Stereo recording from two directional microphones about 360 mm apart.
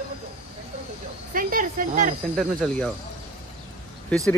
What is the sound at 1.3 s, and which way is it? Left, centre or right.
Speech, right.